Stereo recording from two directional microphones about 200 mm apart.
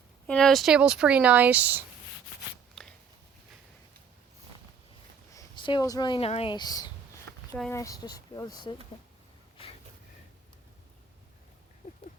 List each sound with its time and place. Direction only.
0.3 s speech: 5° left (ahead or behind)
2.8 s a sound: centre (ahead or behind)
5.3 s speech: 20° left (ahead or behind)